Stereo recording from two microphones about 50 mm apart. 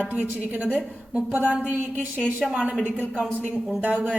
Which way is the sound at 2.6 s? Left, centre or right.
Right.